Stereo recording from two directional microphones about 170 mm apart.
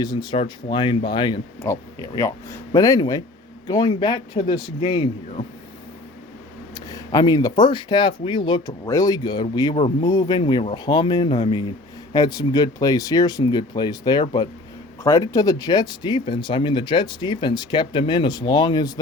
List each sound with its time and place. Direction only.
0.0 s speech: 25° left (ahead or behind)
6.7 s speech: 20° left (ahead or behind)